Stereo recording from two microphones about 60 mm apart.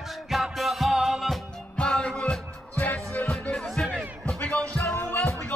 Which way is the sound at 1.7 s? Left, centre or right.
Centre.